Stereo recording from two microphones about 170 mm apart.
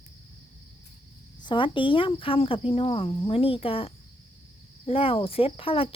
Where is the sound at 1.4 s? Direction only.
30° left (ahead or behind).